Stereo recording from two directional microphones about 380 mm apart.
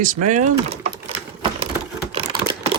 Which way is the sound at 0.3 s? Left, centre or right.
Centre.